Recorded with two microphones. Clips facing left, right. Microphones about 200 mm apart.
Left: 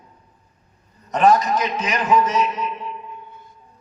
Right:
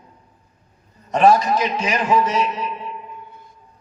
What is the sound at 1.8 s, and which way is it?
Speech, 30° right (ahead or behind).